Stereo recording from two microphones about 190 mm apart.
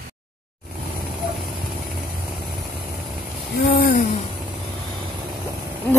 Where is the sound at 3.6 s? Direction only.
55° left (ahead or behind).